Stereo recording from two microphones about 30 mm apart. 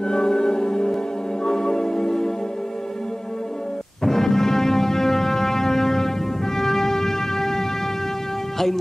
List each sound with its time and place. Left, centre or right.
0.0 s music: left
4.0 s music: centre